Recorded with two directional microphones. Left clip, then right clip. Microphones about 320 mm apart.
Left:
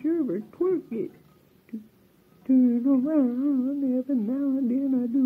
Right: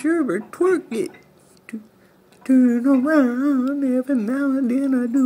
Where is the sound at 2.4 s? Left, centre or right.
Centre.